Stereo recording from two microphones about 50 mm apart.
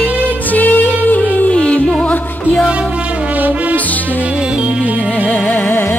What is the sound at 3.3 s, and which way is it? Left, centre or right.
Music, right.